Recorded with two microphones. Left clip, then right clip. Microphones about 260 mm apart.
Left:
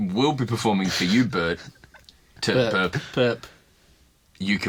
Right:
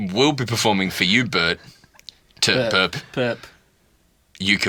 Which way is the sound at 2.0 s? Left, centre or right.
Right.